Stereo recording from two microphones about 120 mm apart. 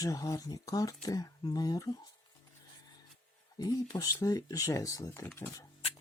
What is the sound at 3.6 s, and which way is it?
Speech, 30° left (ahead or behind).